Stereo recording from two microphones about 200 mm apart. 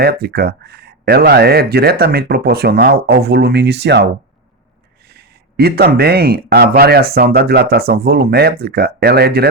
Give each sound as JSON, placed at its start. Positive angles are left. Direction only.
{"t": 0.0, "sound": "speech", "side_deg": -50}